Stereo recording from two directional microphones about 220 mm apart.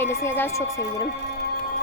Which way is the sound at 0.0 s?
10° left (ahead or behind).